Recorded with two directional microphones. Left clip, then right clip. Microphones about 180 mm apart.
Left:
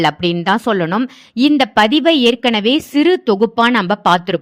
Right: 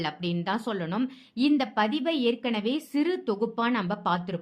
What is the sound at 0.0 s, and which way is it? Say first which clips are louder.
A woman's voice: left 16 dB; 45° left (ahead or behind).